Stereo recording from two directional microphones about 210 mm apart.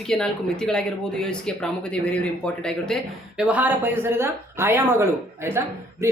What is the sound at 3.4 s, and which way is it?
Speech, 5° right (ahead or behind).